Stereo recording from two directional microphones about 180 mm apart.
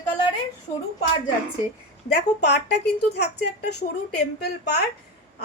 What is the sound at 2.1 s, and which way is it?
A woman's voice, 70° left (ahead or behind).